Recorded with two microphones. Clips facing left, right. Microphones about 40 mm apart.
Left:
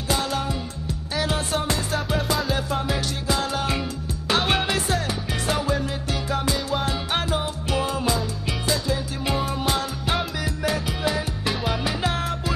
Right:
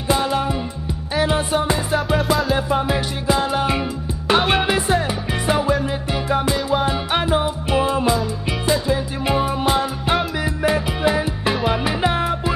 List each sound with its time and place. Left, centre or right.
0.1 s music: centre
2.0 s music: centre
2.5 s music: centre